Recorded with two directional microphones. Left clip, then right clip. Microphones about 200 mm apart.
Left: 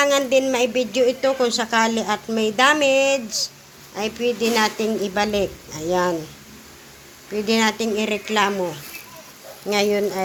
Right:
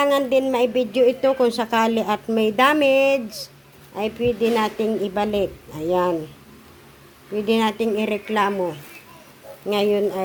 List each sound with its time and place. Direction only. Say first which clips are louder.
0.0 s a woman's voice: left 1 dB; 20° right (ahead or behind)
7.3 s a woman's voice: even; 20° right (ahead or behind)
9.6 s a woman's voice: even; 20° right (ahead or behind)